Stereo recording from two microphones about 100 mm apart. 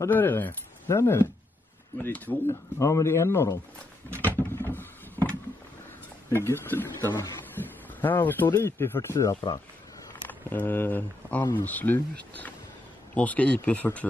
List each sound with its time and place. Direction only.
0.1 s speech: 20° left (ahead or behind)
4.2 s a sound: 20° left (ahead or behind)
6.3 s speech: 25° left (ahead or behind)
7.6 s a sound: 20° left (ahead or behind)
8.0 s speech: 20° left (ahead or behind)
10.2 s speech: 20° left (ahead or behind)